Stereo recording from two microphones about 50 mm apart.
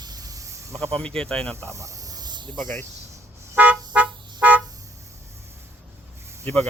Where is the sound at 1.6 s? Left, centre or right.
Right.